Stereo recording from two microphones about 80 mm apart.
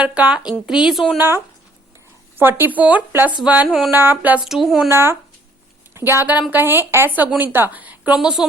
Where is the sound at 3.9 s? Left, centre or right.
Right.